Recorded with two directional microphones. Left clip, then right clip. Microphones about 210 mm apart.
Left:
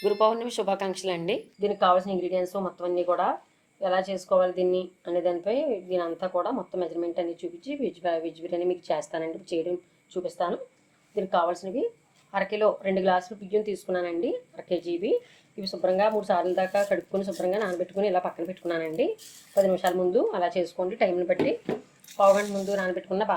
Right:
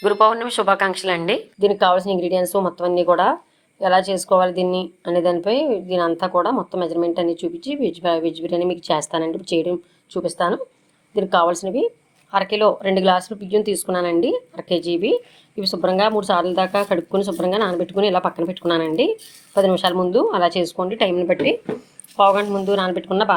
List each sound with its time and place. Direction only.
0.7 s speech: 10° left (ahead or behind)
1.6 s speech: 50° right (ahead or behind)